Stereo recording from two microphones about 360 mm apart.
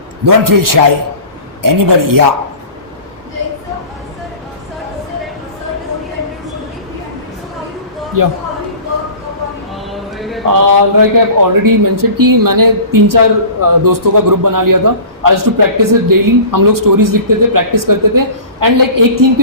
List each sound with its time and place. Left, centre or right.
0.3 s a man's voice: right
8.2 s a man's voice: right
9.7 s clip-clop: centre
10.4 s a man's voice: right